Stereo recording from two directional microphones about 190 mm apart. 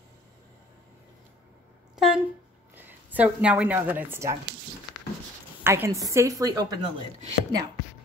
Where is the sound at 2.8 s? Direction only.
10° right (ahead or behind).